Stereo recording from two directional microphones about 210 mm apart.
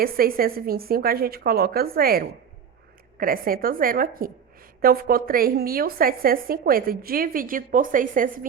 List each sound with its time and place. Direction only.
0.0 s a woman's voice: 45° right (ahead or behind)